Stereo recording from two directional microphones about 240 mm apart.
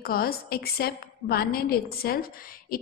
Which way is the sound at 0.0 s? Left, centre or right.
Left.